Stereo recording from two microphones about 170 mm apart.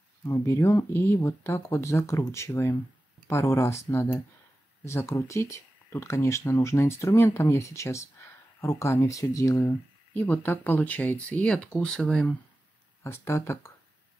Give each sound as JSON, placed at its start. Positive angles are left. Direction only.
{"t": 0.2, "sound": "speech", "side_deg": 15}
{"t": 13.0, "sound": "speech", "side_deg": 15}